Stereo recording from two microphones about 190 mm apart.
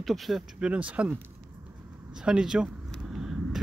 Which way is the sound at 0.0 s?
Centre (ahead or behind).